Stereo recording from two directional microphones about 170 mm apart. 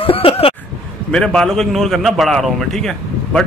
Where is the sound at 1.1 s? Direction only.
5° left (ahead or behind).